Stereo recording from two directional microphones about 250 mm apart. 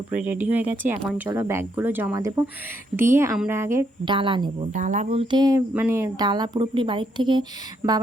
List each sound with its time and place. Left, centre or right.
0.1 s speech: centre